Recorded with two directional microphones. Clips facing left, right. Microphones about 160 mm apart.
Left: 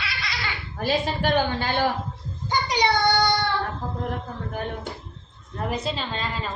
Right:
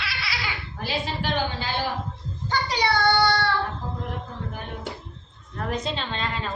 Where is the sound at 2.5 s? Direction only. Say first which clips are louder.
Left 2 dB; 15° left (ahead or behind).